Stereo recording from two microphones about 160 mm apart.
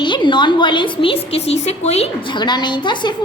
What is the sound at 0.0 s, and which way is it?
A woman's voice, 30° left (ahead or behind).